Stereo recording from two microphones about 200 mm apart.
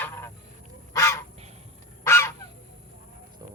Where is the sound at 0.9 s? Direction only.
15° left (ahead or behind).